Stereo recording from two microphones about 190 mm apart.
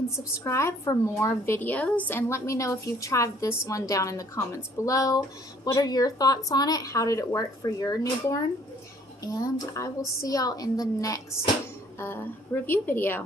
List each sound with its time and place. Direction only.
0.4 s a woman's voice: 15° left (ahead or behind)